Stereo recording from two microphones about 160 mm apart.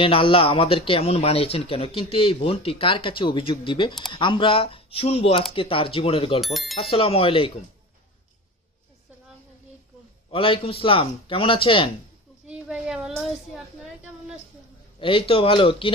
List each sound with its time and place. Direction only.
0.0 s a man's voice: 35° left (ahead or behind)
6.4 s speech: centre (ahead or behind)
6.8 s a man's voice: 35° left (ahead or behind)
10.3 s a man's voice: 35° left (ahead or behind)
12.4 s a child's voice: 5° right (ahead or behind)
15.0 s a man's voice: 35° left (ahead or behind)